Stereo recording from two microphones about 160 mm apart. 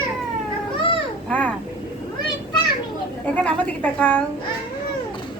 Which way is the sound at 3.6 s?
10° left (ahead or behind).